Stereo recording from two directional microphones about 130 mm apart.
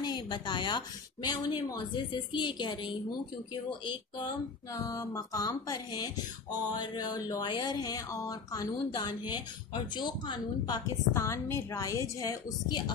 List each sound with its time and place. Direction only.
0.0 s a woman's voice: 35° left (ahead or behind)
4.7 s a woman's voice: 25° left (ahead or behind)
11.1 s a woman's voice: 20° left (ahead or behind)